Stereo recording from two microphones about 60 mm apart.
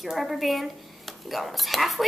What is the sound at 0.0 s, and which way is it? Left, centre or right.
Speech, centre.